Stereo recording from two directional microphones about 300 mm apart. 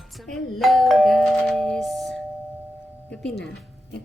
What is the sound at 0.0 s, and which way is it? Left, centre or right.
Doorbell, centre.